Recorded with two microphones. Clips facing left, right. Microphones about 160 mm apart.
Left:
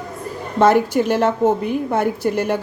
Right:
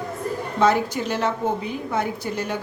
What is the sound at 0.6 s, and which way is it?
A woman's voice, 55° left (ahead or behind).